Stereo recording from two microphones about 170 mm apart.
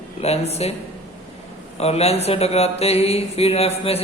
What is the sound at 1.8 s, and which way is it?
Speech, 35° left (ahead or behind).